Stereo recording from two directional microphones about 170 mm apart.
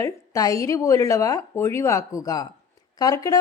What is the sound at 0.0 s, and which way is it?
A woman's voice, 20° left (ahead or behind).